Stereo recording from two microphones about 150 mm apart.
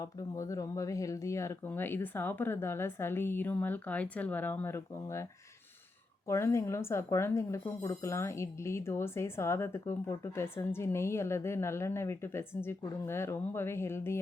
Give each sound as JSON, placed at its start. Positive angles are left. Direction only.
{"t": 0.0, "sound": "speech", "side_deg": 20}
{"t": 6.2, "sound": "speech", "side_deg": 20}